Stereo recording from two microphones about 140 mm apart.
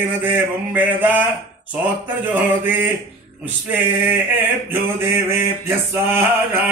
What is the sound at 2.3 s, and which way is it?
Male singing, 15° right (ahead or behind).